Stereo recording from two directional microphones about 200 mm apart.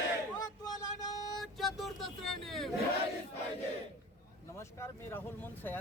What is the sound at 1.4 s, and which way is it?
Vehicle, centre (ahead or behind).